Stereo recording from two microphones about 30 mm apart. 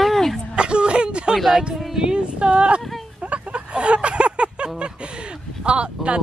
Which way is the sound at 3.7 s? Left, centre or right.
Right.